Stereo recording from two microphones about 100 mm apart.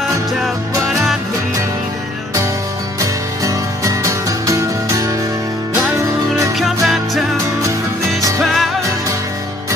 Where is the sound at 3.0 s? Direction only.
35° right (ahead or behind).